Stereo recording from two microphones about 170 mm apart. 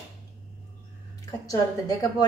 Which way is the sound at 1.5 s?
20° left (ahead or behind).